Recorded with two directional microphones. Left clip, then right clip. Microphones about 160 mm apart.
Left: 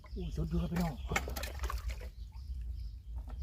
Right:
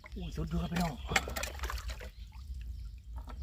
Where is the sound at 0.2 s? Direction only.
65° right (ahead or behind).